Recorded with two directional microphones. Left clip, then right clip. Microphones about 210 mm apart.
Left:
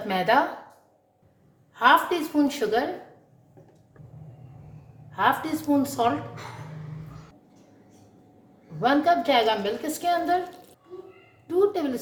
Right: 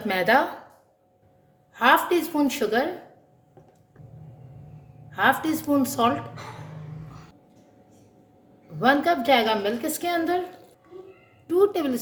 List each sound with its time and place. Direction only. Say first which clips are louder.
0.1 s a woman's voice: right 1 dB; 40° right (ahead or behind)
1.7 s a woman's voice: even; 40° right (ahead or behind)
5.1 s a woman's voice: right 2 dB; 35° right (ahead or behind)
8.8 s a woman's voice: even; 40° right (ahead or behind)
11.4 s a woman's voice: right 2 dB; 35° right (ahead or behind)